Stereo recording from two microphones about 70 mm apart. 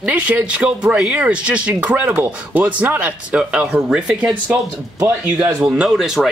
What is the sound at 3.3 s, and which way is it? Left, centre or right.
Speech, centre.